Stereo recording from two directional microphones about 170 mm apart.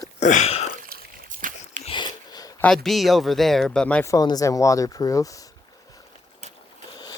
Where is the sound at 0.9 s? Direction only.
55° right (ahead or behind).